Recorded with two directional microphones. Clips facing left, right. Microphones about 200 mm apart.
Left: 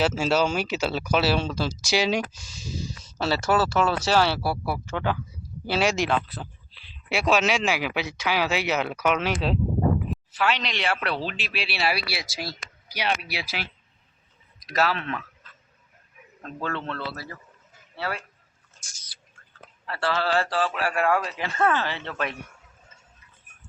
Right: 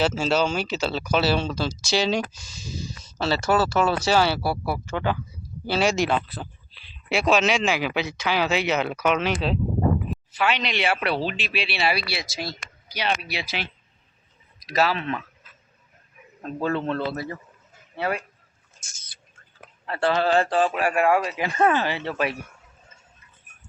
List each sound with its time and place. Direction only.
0.0 s speech: 5° left (ahead or behind)
14.7 s a man's voice: centre (ahead or behind); by 18.3 s 20° right (ahead or behind)
18.8 s rodents: 25° right (ahead or behind)
19.8 s a man's voice: 20° right (ahead or behind)